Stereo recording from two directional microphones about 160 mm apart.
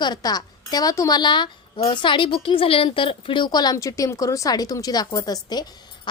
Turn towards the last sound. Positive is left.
turn(degrees=25)  # may be behind; listen again after turning